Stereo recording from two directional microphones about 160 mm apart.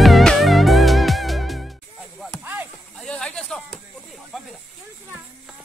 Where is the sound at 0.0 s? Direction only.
Centre (ahead or behind).